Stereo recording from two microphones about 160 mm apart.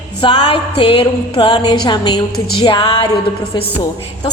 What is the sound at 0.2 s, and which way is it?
A woman's voice, 30° left (ahead or behind).